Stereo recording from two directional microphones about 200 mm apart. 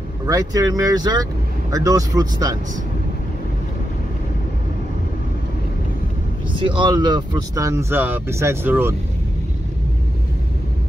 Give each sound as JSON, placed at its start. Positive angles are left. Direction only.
{"t": 0.3, "sound": "speech", "side_deg": -20}
{"t": 6.5, "sound": "speech", "side_deg": -25}